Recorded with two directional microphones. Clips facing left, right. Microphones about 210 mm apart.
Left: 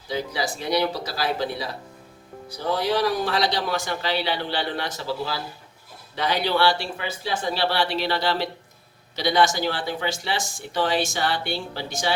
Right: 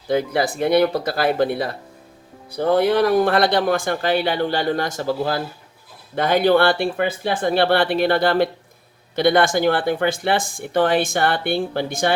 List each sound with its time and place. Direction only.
0.1 s speech: 55° right (ahead or behind)